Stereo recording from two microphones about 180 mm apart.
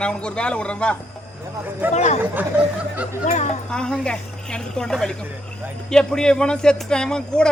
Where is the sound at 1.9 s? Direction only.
40° left (ahead or behind).